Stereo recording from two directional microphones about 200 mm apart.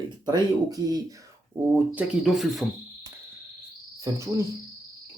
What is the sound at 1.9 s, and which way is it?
Cricket, centre (ahead or behind).